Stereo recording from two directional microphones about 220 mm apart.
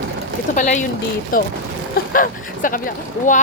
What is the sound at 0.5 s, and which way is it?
Speech, 35° left (ahead or behind).